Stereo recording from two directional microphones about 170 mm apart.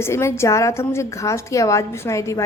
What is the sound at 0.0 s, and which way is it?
A woman's voice, 15° left (ahead or behind).